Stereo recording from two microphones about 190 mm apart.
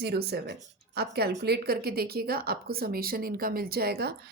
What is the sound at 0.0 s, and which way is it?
A woman's voice, 60° right (ahead or behind).